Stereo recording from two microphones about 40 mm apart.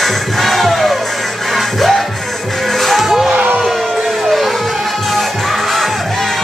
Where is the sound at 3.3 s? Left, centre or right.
Right.